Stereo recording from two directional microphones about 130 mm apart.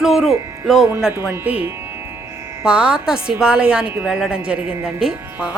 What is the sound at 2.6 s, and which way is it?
A woman's voice, 5° right (ahead or behind).